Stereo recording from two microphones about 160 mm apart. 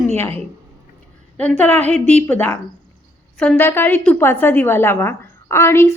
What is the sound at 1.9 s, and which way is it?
Speech, 45° right (ahead or behind).